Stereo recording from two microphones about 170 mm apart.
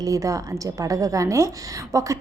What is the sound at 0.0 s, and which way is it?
A woman's voice, 20° right (ahead or behind).